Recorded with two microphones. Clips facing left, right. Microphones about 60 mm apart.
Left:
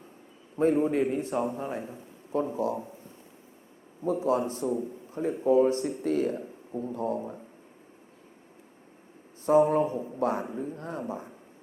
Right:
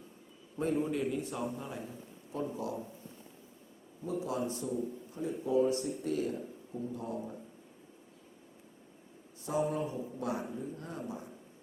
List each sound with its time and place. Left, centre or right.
0.5 s a man's voice: left
4.0 s a man's voice: left
9.5 s a man's voice: left